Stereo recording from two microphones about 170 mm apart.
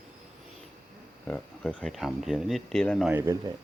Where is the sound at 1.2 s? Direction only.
5° left (ahead or behind).